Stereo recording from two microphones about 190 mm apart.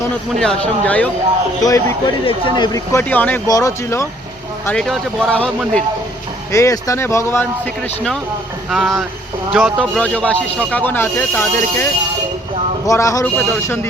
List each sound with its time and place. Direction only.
0.3 s speech: 5° left (ahead or behind)
1.6 s speech: 20° left (ahead or behind)
4.6 s speech: 5° left (ahead or behind)
6.5 s speech: 15° left (ahead or behind)
12.9 s speech: 15° left (ahead or behind)